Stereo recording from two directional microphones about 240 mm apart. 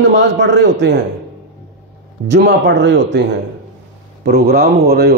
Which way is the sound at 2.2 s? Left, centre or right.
Right.